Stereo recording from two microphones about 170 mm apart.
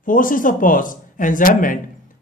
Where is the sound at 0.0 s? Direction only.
50° left (ahead or behind).